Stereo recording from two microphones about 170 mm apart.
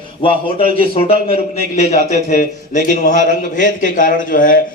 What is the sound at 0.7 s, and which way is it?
Speech, 35° left (ahead or behind).